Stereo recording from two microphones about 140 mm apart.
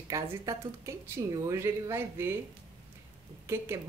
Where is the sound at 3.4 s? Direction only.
20° right (ahead or behind).